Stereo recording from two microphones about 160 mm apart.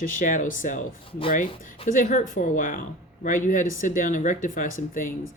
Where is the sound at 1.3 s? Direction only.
55° left (ahead or behind).